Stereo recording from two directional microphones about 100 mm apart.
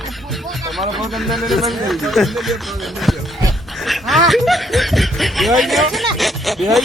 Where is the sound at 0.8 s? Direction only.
Centre (ahead or behind).